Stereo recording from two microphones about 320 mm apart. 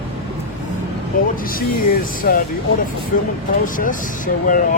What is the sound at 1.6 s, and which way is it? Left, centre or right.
Speech, left.